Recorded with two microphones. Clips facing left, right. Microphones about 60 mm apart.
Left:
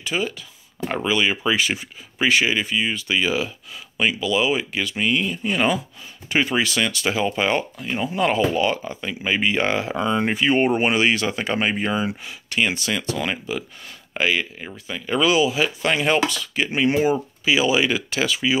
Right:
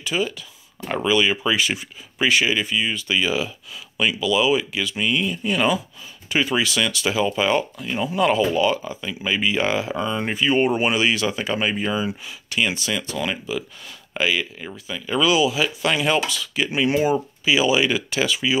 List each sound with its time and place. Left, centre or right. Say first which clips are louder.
0.0 s speech: right 1 dB; left
16.9 s speech: even; left